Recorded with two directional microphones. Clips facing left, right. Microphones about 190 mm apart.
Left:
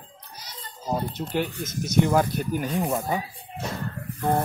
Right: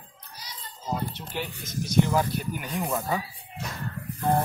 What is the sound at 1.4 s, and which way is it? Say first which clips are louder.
Speech: left 2 dB; 50° left (ahead or behind).